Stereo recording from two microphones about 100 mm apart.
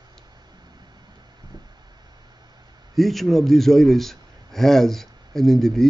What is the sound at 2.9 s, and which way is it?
A man's voice, centre (ahead or behind).